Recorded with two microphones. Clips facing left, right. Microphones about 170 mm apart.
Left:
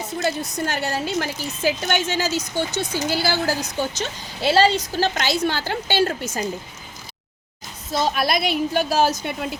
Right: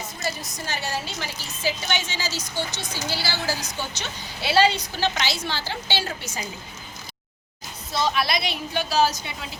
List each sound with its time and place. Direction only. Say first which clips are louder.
0.2 s a woman's voice: left 9 dB; 60° left (ahead or behind)
7.9 s a woman's voice: left 3 dB; 45° left (ahead or behind)